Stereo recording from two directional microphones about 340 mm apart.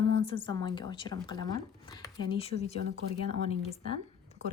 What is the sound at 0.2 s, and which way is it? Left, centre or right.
Speech, centre.